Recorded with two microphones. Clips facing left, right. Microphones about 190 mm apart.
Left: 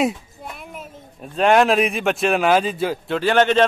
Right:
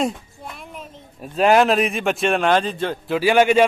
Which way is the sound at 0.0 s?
5° left (ahead or behind).